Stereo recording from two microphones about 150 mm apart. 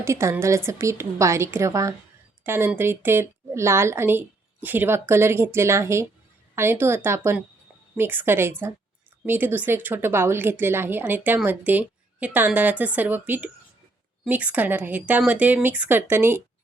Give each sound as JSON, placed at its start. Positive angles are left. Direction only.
{"t": 0.0, "sound": "a woman's voice", "side_deg": -20}